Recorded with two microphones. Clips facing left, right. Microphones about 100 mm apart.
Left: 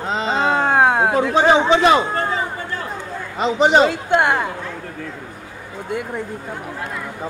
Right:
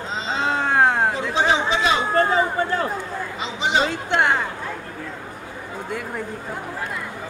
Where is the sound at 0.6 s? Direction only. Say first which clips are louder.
Left 2 dB; 10° left (ahead or behind).